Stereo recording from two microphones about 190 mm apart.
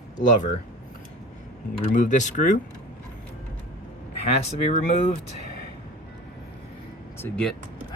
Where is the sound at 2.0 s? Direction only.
40° left (ahead or behind).